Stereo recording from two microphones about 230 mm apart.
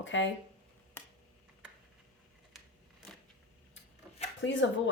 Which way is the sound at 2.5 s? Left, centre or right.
Centre.